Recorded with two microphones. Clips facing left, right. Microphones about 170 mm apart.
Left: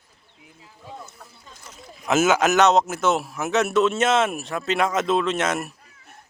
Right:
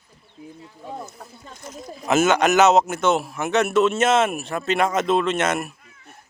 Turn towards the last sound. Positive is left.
turn(degrees=0)  # may be behind; listen again after turning